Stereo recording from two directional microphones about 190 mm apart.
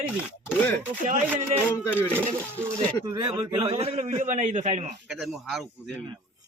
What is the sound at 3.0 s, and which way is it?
A man's voice, 20° right (ahead or behind).